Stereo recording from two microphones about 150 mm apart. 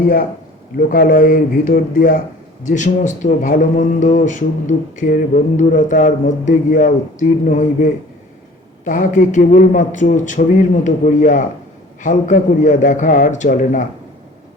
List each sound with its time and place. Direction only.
0.9 s a man's voice: 70° left (ahead or behind)